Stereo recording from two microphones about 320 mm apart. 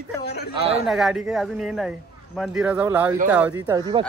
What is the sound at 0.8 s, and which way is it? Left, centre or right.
Speech, centre.